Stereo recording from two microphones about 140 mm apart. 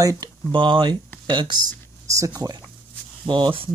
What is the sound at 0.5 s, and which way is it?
Speech, 35° right (ahead or behind).